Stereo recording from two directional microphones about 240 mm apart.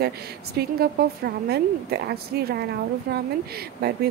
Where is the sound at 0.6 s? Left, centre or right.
Right.